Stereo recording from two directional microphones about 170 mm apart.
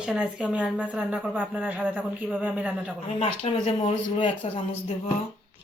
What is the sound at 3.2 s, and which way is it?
Speech, 35° left (ahead or behind).